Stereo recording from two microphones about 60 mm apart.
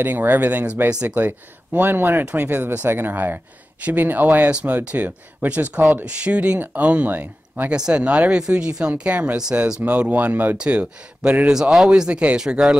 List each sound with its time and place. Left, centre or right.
0.0 s speech: right
7.7 s speech: centre
9.4 s speech: centre
11.7 s speech: centre